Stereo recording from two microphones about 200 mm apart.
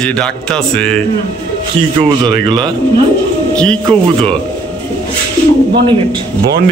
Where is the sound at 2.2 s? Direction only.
25° right (ahead or behind).